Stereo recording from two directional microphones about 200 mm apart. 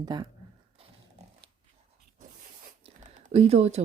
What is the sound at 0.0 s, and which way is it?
Speech, 20° right (ahead or behind).